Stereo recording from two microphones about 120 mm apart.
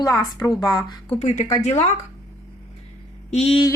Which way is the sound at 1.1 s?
75° left (ahead or behind).